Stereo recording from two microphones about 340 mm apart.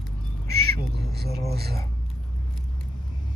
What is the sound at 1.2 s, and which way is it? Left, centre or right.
Speech, right.